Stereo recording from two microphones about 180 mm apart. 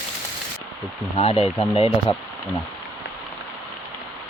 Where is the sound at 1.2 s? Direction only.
30° left (ahead or behind).